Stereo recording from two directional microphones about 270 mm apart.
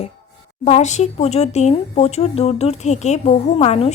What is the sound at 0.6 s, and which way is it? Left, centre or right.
Speech, left.